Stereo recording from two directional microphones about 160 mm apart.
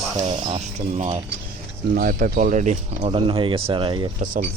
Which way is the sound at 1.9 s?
65° right (ahead or behind).